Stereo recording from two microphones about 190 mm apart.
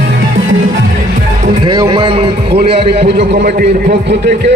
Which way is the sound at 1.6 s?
25° right (ahead or behind).